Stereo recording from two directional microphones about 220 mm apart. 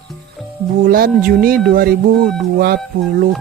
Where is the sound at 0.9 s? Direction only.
40° right (ahead or behind).